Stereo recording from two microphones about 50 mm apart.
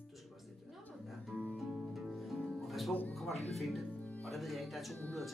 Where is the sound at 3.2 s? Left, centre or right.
Centre.